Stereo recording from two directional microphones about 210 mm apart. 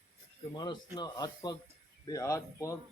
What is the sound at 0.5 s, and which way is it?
A man's voice, 20° left (ahead or behind).